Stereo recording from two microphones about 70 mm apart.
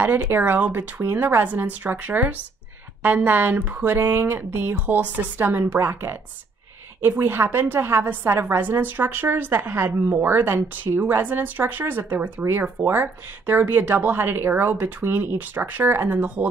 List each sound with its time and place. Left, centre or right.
0.0 s a woman's voice: right